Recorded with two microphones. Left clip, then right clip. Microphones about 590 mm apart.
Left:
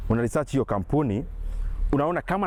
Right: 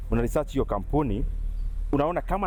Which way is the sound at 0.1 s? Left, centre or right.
Left.